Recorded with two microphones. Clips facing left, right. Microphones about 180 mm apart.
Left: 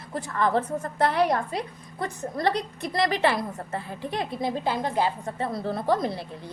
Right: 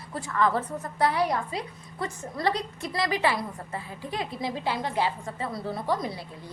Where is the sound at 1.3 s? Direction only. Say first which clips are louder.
Left 3 dB; 50° left (ahead or behind).